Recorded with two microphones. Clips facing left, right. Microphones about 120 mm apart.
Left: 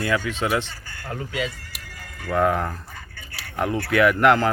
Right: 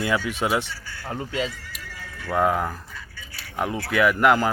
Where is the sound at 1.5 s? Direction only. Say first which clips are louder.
Even; 55° left (ahead or behind).